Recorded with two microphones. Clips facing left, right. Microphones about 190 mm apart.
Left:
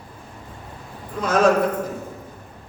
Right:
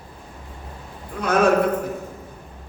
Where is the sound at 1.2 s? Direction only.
60° right (ahead or behind).